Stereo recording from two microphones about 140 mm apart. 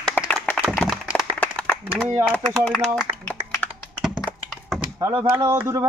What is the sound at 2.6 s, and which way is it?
Speech, 5° left (ahead or behind).